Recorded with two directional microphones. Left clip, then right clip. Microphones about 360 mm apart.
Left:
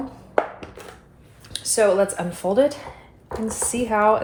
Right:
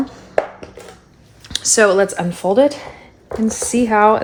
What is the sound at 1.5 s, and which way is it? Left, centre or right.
Speech, centre.